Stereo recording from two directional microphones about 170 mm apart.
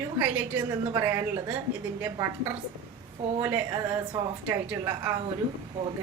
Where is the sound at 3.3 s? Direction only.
15° right (ahead or behind).